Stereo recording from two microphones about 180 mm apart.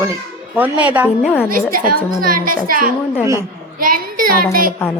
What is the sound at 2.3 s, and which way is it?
Speech, 50° right (ahead or behind).